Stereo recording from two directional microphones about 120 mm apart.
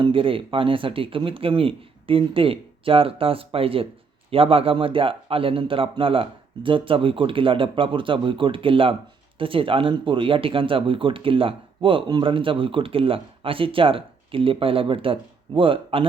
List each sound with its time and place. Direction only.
0.0 s speech: 50° right (ahead or behind)